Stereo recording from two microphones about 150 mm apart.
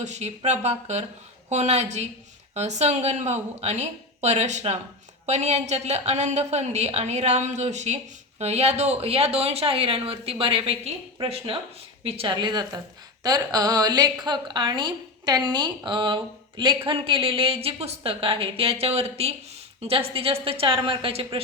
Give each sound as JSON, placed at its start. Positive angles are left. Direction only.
{"t": 0.0, "sound": "a woman's voice", "side_deg": -50}